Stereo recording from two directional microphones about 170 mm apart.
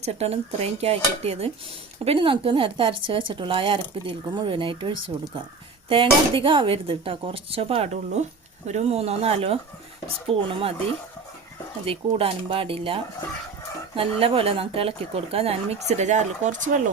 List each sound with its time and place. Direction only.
0.0 s speech: 40° right (ahead or behind)
11.9 s speech: 35° right (ahead or behind)